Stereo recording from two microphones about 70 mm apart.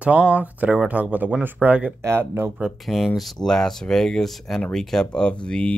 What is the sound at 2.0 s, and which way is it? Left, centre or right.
Speech, right.